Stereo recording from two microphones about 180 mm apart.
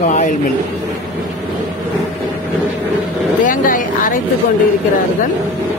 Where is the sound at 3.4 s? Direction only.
50° left (ahead or behind).